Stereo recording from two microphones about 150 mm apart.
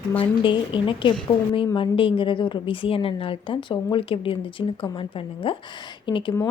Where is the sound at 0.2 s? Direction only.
35° left (ahead or behind).